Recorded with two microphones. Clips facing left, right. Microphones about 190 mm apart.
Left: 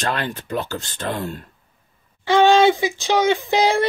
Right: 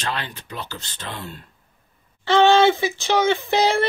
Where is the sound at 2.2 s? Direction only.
15° left (ahead or behind).